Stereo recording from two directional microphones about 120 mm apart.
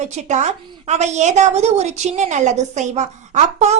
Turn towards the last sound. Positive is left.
turn(degrees=-70)  # may be behind; listen again after turning